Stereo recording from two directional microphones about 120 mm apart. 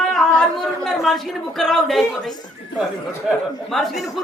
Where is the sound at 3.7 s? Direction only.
Centre (ahead or behind).